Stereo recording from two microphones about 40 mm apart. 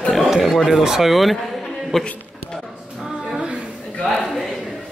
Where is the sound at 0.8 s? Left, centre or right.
Centre.